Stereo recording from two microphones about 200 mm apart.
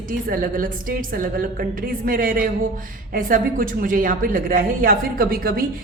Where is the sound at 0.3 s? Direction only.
45° right (ahead or behind).